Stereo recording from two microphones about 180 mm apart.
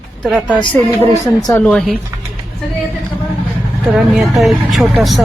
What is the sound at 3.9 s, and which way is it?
Speech, centre (ahead or behind).